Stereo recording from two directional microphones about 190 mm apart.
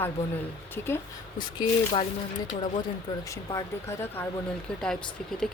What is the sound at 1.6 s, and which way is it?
Speech, 30° left (ahead or behind).